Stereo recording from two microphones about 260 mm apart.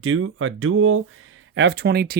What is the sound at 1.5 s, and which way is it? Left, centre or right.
Speech, right.